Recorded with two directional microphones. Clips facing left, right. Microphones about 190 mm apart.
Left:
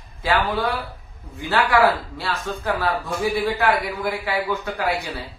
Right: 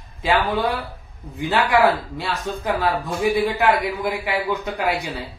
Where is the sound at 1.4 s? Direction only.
20° right (ahead or behind).